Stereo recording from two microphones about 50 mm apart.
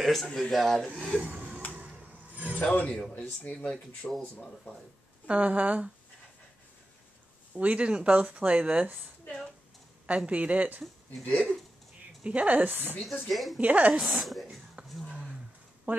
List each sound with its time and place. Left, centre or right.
0.0 s speech: centre
1.1 s a sound: right
2.5 s a man's voice: left
5.2 s speech: right
7.5 s speech: right
10.0 s speech: right
12.2 s a woman's voice: right
13.3 s speech: centre
13.6 s speech: right
13.9 s speech: centre
15.9 s speech: right